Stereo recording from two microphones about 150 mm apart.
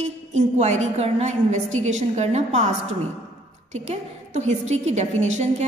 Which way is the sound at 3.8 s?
50° right (ahead or behind).